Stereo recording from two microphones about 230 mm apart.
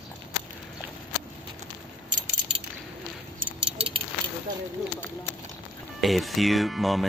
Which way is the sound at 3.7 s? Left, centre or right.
Right.